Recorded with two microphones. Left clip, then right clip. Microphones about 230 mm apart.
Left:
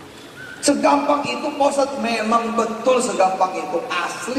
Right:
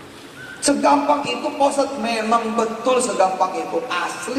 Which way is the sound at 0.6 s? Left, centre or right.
Right.